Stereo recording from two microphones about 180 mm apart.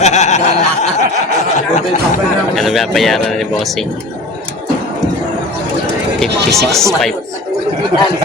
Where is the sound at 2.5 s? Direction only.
Centre (ahead or behind).